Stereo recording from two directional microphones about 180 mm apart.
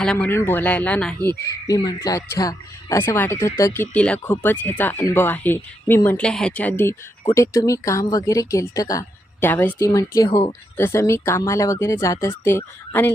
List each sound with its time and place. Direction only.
0.0 s speech: 5° left (ahead or behind)
1.5 s speech: 20° left (ahead or behind)